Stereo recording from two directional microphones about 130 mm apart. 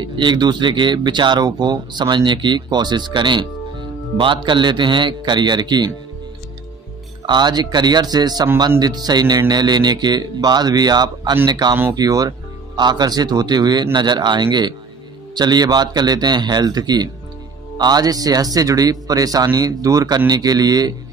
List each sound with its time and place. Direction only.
0.0 s speech: 35° right (ahead or behind)
7.2 s a man's voice: 35° right (ahead or behind)